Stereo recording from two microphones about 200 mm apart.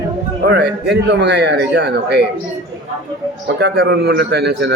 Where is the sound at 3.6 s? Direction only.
55° right (ahead or behind).